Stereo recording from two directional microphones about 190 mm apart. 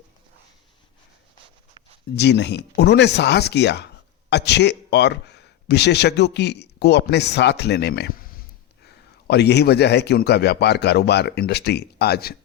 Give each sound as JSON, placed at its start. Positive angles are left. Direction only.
{"t": 2.1, "sound": "a man's voice", "side_deg": 65}